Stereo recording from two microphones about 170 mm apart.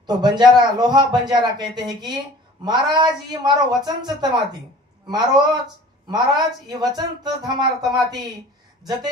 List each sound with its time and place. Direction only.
0.0 s a man's voice: 25° right (ahead or behind)